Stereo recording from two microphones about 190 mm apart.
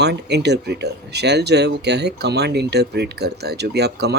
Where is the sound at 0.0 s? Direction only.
60° right (ahead or behind).